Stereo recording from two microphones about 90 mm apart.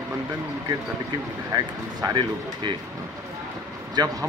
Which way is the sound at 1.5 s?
45° right (ahead or behind).